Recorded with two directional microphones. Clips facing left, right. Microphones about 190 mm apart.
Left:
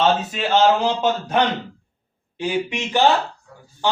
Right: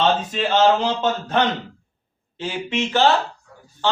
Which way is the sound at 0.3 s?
10° left (ahead or behind).